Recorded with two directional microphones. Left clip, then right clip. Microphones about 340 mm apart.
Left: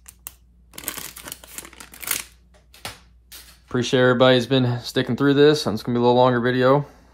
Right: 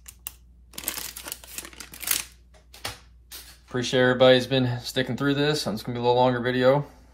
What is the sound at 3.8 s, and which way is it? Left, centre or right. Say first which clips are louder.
Speech: left 3 dB; centre.